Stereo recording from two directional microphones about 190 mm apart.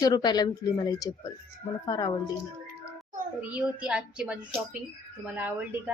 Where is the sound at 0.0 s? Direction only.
20° left (ahead or behind).